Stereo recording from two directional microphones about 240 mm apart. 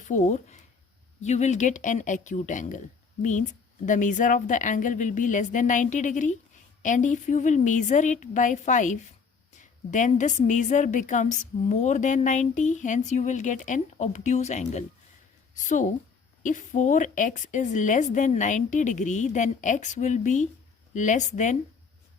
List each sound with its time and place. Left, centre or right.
0.1 s a woman's voice: left